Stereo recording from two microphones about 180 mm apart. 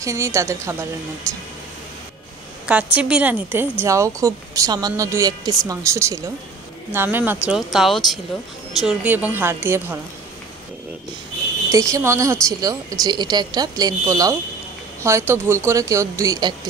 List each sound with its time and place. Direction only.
0.0 s speech: 15° right (ahead or behind)
2.6 s a woman's voice: 5° right (ahead or behind)
11.7 s a woman's voice: 15° right (ahead or behind)